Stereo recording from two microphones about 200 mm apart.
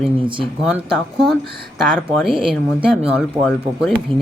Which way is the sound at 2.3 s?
25° right (ahead or behind).